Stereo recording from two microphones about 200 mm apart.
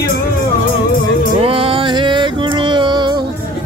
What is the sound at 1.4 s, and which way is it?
Music, 25° right (ahead or behind).